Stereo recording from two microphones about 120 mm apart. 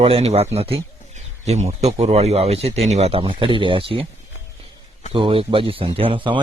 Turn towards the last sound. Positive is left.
turn(degrees=-45)  # may be behind; listen again after turning